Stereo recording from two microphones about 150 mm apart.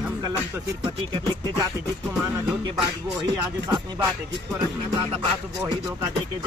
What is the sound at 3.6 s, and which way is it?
Music, 30° right (ahead or behind).